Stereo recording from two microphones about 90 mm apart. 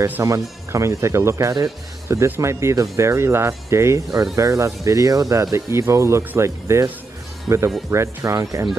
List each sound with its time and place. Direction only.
0.2 s speech: 35° right (ahead or behind)